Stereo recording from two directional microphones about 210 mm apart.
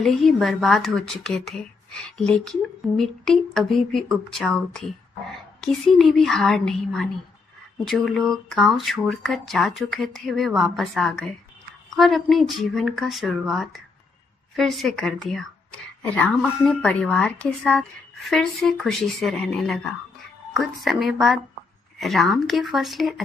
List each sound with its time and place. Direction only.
0.0 s speech: centre (ahead or behind)